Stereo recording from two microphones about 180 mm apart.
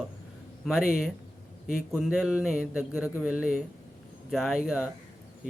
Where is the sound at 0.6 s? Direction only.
5° right (ahead or behind).